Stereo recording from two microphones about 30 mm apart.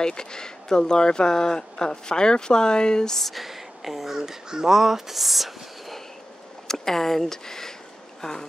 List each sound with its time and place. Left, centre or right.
0.0 s speech: left
3.3 s speech: centre
4.2 s speech: right; by 5.9 s centre
6.7 s speech: centre